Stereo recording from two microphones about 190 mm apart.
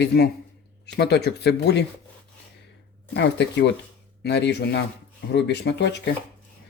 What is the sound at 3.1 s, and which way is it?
Speech, 65° left (ahead or behind).